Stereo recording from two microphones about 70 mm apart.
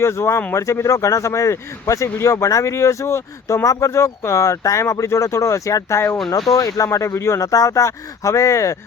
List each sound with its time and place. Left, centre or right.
0.0 s a man's voice: left